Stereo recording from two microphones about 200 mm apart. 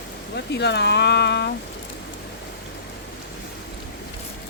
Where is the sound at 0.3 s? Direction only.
60° left (ahead or behind).